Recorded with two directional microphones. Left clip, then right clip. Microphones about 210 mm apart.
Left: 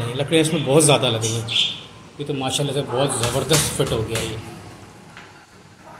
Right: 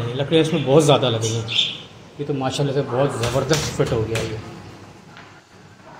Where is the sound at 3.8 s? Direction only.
10° right (ahead or behind).